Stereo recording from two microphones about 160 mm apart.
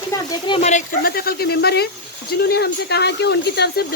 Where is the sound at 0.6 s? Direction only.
55° left (ahead or behind); by 1.9 s 90° left.